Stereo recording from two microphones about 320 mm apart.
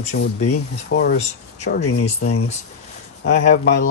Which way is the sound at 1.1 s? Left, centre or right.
Left.